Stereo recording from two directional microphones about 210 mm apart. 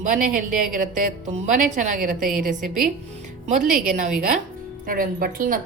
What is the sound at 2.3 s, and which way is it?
Speech, 5° right (ahead or behind).